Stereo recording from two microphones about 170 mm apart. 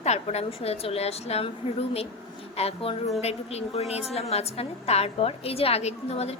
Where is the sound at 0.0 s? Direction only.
40° left (ahead or behind).